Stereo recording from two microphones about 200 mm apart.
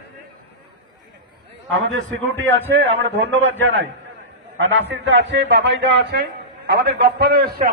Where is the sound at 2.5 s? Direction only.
70° right (ahead or behind).